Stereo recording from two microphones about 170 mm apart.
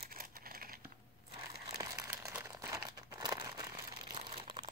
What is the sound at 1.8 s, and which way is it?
Crumpling, 15° right (ahead or behind).